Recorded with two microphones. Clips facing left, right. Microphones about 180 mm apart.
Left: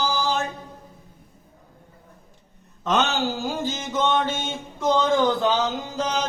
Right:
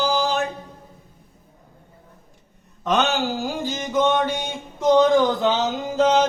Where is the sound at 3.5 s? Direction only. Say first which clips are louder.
Right 1 dB; 15° right (ahead or behind).